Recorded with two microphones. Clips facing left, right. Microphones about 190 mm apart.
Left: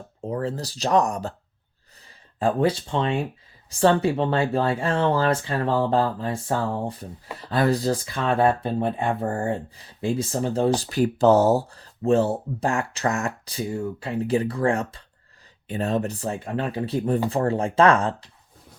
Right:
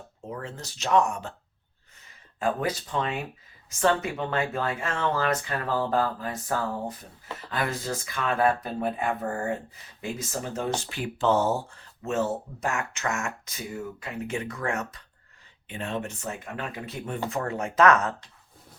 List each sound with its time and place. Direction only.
0.3 s speech: 35° left (ahead or behind)
2.4 s speech: 30° left (ahead or behind)